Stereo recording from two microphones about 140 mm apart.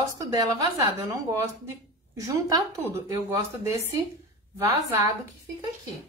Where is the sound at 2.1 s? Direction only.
25° right (ahead or behind).